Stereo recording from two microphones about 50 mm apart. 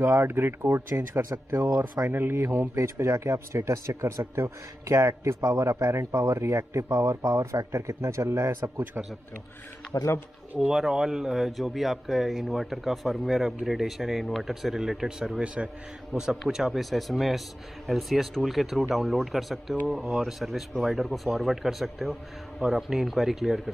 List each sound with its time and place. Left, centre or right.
0.0 s a man's voice: right
10.6 s a man's voice: centre
16.1 s a man's voice: centre